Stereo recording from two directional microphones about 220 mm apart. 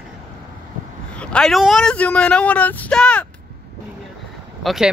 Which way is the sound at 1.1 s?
5° left (ahead or behind).